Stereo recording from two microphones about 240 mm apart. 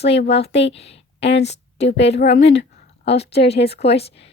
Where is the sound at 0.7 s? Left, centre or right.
Left.